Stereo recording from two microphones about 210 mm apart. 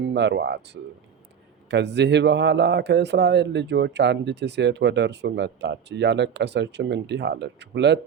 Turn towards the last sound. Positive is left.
turn(degrees=-55)  # may be behind; listen again after turning